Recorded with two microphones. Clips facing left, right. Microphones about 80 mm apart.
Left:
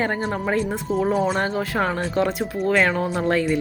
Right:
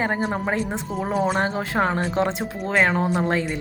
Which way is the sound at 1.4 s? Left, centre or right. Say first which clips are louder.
Even; right.